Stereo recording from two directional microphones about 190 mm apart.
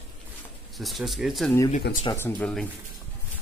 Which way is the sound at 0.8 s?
Centre (ahead or behind).